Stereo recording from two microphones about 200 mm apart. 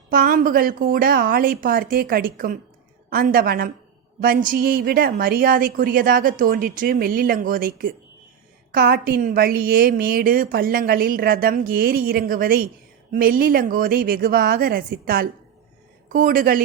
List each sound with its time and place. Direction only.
0.1 s a woman's voice: 45° right (ahead or behind)